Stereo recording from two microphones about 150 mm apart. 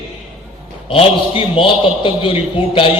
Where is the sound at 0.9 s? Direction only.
35° left (ahead or behind).